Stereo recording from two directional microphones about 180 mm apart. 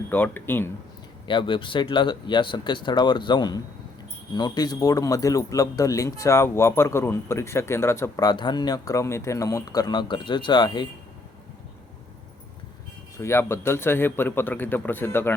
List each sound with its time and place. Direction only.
0.1 s speech: 10° left (ahead or behind)
1.3 s speech: 25° left (ahead or behind)
13.1 s speech: 15° left (ahead or behind)